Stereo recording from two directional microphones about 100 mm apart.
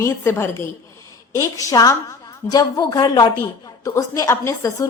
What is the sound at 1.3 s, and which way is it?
A woman's voice, 35° left (ahead or behind).